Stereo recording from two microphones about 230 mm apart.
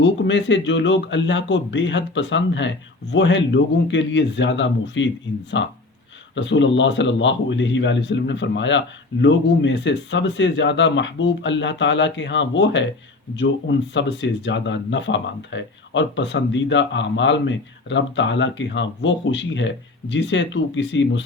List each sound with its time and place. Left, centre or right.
0.0 s speech: left